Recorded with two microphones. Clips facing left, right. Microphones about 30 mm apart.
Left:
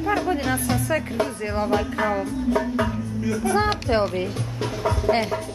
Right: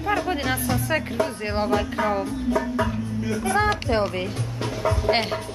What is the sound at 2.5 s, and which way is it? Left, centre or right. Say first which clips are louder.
Speech: left 1 dB; centre.